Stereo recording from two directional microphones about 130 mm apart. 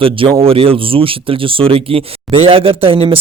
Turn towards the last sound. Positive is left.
turn(degrees=-45)  # may be behind; listen again after turning